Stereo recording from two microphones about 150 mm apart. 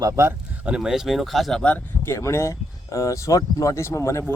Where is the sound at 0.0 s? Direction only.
15° right (ahead or behind).